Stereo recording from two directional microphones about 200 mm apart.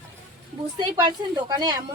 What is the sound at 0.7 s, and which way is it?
Speech, 20° right (ahead or behind).